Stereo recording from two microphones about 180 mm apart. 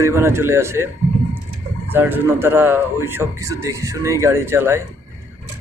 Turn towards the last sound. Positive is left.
turn(degrees=-15)  # may be behind; listen again after turning